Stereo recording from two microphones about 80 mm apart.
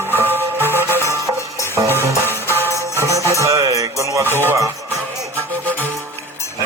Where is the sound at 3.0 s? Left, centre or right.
Right.